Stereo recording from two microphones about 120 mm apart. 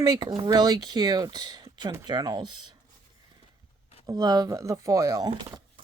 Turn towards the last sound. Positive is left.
turn(degrees=-30)  # may be behind; listen again after turning